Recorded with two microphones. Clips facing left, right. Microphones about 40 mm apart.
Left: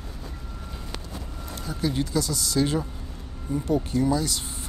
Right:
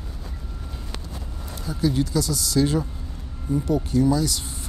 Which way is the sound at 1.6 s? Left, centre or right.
Left.